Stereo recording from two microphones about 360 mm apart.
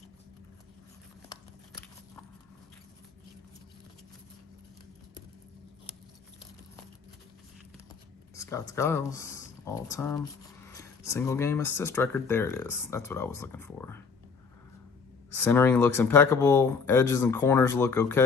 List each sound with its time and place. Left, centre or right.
8.4 s speech: centre
15.3 s speech: centre